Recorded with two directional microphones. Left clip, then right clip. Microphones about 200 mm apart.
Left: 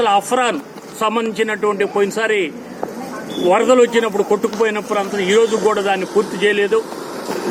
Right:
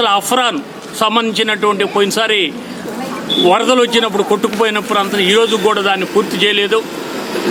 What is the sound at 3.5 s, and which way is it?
A man's voice, 20° right (ahead or behind).